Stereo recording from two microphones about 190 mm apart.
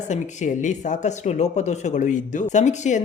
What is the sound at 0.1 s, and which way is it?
A man's voice, 40° left (ahead or behind).